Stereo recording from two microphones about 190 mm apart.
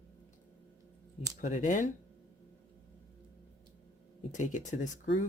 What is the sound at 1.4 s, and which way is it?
Speech, 40° left (ahead or behind).